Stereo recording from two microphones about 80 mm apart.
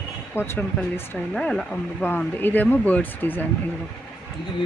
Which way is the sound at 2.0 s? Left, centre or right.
Left.